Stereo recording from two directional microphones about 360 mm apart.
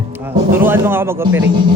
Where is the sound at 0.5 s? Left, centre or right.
Centre.